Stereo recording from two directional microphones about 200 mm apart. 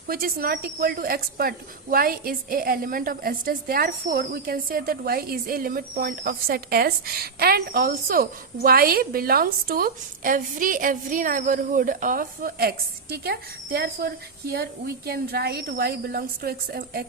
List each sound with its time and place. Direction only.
0.1 s a woman's voice: 45° right (ahead or behind)